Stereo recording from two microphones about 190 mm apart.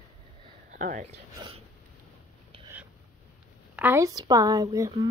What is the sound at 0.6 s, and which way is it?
Speech, 45° right (ahead or behind).